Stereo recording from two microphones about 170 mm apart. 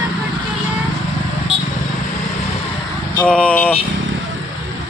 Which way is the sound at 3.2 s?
5° left (ahead or behind).